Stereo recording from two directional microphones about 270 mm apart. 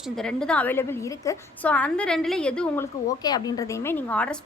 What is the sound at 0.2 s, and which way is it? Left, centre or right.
A woman's voice, centre.